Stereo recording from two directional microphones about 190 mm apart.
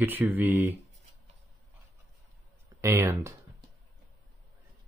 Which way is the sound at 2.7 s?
15° right (ahead or behind).